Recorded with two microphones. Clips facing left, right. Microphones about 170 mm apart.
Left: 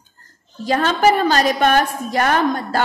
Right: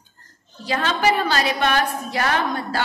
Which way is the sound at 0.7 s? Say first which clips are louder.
Left 5 dB; 45° left (ahead or behind).